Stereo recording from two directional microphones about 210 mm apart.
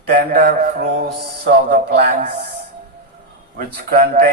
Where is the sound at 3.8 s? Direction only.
45° right (ahead or behind).